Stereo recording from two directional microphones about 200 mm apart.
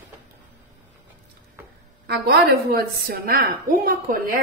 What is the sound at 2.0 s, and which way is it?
A woman's voice, 55° right (ahead or behind).